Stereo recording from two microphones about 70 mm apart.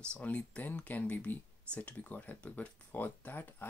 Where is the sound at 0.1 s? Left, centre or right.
Centre.